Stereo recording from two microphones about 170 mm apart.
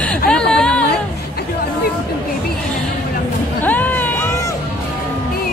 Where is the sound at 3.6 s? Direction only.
10° left (ahead or behind).